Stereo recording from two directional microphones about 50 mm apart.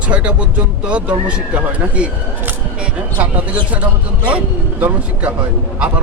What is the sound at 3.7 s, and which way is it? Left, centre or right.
Speech, right.